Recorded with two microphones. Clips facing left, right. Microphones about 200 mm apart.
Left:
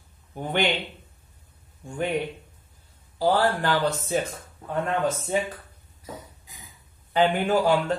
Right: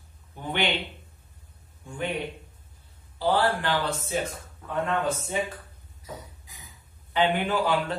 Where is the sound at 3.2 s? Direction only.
40° left (ahead or behind).